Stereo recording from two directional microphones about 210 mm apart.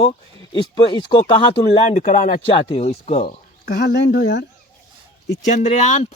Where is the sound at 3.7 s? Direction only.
45° left (ahead or behind).